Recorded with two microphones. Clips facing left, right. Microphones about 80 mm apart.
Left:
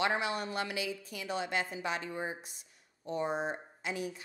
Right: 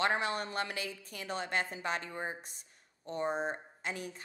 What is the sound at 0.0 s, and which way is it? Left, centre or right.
A woman's voice, right.